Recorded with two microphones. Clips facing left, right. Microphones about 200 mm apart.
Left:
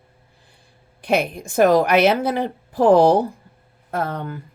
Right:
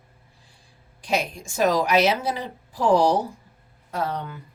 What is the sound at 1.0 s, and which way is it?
Speech, 60° left (ahead or behind).